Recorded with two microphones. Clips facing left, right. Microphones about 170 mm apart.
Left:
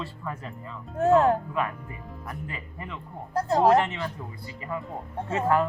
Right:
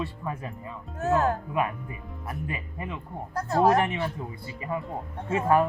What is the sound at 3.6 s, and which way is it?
Speech, 25° left (ahead or behind).